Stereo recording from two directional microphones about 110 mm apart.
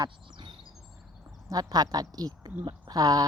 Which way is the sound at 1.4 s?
35° right (ahead or behind).